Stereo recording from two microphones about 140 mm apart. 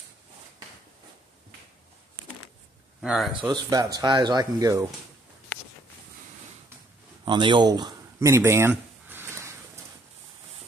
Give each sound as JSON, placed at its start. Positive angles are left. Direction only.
{"t": 3.0, "sound": "speech", "side_deg": -5}
{"t": 3.5, "sound": "speech", "side_deg": -30}
{"t": 7.2, "sound": "a sound", "side_deg": -35}